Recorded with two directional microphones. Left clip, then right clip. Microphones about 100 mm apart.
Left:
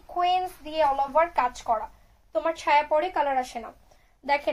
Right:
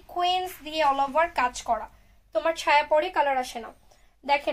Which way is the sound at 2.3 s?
10° left (ahead or behind).